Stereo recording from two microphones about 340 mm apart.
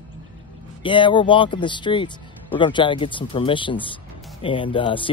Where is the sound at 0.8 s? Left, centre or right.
Centre.